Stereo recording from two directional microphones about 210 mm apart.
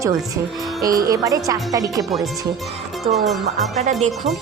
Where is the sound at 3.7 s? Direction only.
35° right (ahead or behind).